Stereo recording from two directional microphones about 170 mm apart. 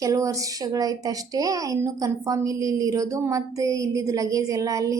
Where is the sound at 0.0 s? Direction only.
20° right (ahead or behind).